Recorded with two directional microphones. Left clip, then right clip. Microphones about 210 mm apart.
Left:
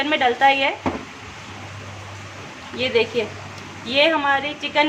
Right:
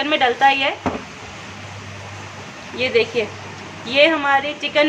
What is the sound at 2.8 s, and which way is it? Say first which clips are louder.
A woman's voice: right 2 dB; 5° right (ahead or behind).